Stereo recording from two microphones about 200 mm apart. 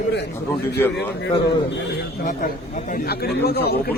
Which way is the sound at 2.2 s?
40° left (ahead or behind).